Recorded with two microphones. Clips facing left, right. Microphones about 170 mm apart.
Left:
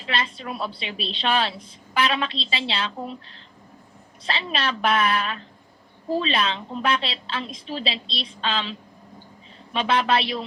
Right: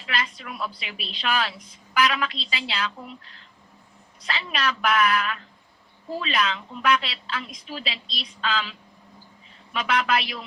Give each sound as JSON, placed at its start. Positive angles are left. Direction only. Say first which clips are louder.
{"t": 0.1, "sound": "a woman's voice", "louder": "left 3 dB", "side_deg": 30}
{"t": 9.7, "sound": "a woman's voice", "louder": "left 3 dB", "side_deg": 30}